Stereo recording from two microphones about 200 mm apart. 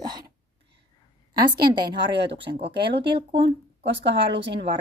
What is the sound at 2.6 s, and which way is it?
Speech, 25° right (ahead or behind).